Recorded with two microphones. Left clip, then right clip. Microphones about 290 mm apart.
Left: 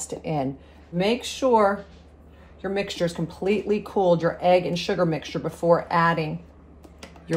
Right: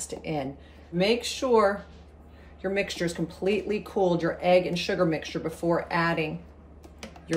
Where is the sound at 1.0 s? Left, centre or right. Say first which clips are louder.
Left 2 dB; centre.